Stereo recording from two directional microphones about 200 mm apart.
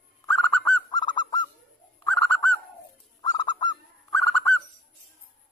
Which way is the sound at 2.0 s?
10° left (ahead or behind).